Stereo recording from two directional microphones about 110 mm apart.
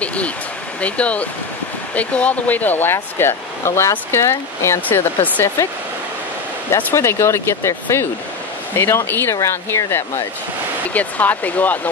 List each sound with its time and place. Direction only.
0.0 s speech: 10° left (ahead or behind)
6.7 s speech: 25° left (ahead or behind)